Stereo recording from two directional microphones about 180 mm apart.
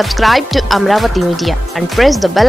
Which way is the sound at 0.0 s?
Centre (ahead or behind).